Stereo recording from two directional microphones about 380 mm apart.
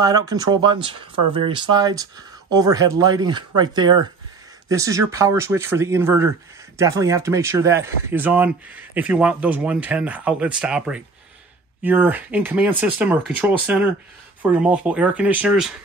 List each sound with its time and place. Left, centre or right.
0.0 s speech: centre